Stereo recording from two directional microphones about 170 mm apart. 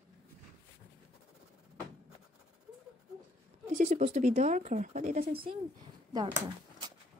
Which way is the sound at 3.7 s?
45° right (ahead or behind).